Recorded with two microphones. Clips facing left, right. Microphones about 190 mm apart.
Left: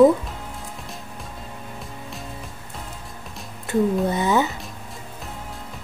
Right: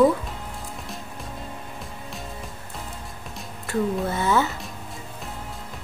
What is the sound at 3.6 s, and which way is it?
Speech, 20° left (ahead or behind).